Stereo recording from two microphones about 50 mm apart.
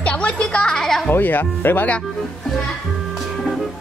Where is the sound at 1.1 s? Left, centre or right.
Left.